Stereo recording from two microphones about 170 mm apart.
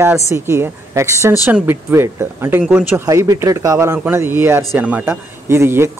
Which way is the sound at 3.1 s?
20° right (ahead or behind).